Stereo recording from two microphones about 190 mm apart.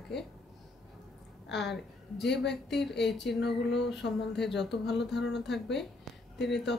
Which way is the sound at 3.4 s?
65° left (ahead or behind).